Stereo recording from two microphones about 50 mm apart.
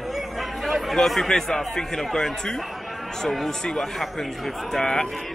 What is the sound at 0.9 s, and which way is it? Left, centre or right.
Speech, centre.